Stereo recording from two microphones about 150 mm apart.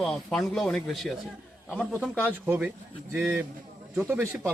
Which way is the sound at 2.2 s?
10° right (ahead or behind).